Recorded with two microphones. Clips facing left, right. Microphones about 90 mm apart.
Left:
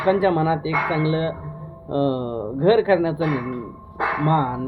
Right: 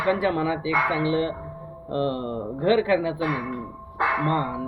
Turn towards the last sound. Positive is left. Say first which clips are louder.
# left 4 dB
turn(degrees=35)  # may be behind; listen again after turning